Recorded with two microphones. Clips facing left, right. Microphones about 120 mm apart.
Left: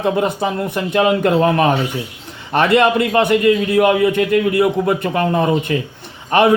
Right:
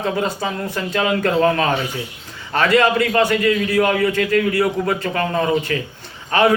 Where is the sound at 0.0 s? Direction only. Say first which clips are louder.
Left 4 dB; 20° left (ahead or behind).